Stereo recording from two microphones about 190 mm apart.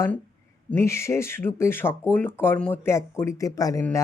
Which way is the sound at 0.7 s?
15° left (ahead or behind).